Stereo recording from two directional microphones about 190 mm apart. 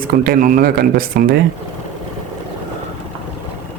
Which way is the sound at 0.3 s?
50° right (ahead or behind).